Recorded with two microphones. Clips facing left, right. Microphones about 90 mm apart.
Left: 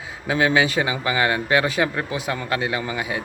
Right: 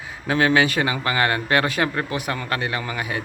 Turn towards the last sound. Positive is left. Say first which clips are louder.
# left 1 dB
turn(degrees=15)  # may be behind; listen again after turning